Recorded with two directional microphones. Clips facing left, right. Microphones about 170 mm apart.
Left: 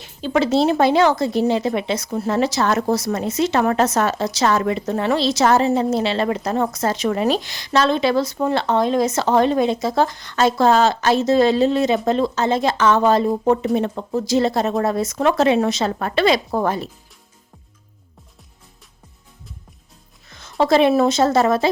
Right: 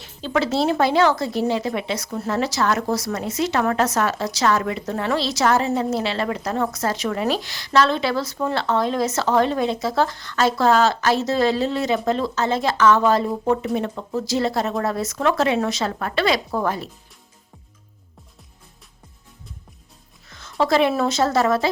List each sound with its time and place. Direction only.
0.0 s speech: 20° left (ahead or behind)
20.3 s music: 20° left (ahead or behind)
20.9 s speech: 20° left (ahead or behind)